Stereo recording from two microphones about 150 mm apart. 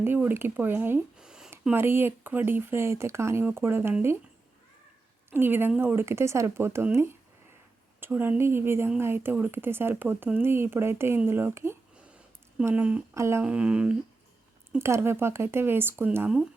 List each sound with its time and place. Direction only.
0.0 s speech: 15° right (ahead or behind)
1.7 s speech: 15° right (ahead or behind)
5.3 s speech: 15° right (ahead or behind)
13.4 s speech: 10° right (ahead or behind)
14.8 s speech: 20° right (ahead or behind)